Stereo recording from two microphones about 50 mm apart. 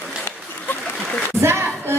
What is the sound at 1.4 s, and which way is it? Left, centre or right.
Speech, right.